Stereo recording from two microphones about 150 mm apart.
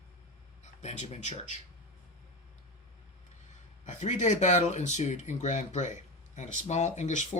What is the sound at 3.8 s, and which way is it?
Speech, 55° left (ahead or behind).